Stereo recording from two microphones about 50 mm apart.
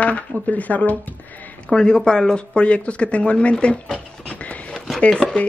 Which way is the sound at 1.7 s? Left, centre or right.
Centre.